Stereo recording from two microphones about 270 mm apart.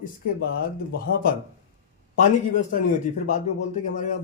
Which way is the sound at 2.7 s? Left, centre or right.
Left.